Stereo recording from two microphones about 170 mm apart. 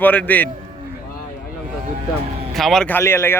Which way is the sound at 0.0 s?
10° left (ahead or behind).